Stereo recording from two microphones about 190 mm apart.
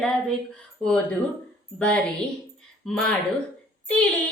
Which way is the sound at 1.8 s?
5° left (ahead or behind).